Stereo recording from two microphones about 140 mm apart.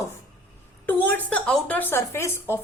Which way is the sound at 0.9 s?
10° left (ahead or behind).